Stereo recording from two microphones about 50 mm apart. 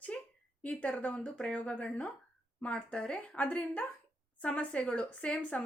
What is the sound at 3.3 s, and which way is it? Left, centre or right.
A woman's voice, left.